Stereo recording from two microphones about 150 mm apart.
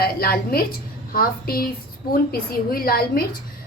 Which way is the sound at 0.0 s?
90° left.